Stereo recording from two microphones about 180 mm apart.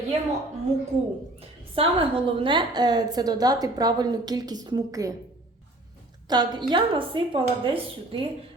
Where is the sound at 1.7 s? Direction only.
30° right (ahead or behind).